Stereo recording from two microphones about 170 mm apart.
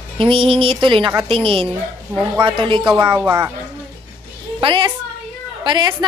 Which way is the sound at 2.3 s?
30° right (ahead or behind).